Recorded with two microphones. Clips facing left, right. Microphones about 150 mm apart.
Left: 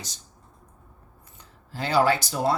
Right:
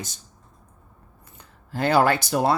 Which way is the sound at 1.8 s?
55° right (ahead or behind).